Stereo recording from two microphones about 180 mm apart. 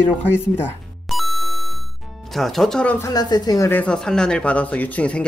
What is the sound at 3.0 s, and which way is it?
Speech, 20° left (ahead or behind).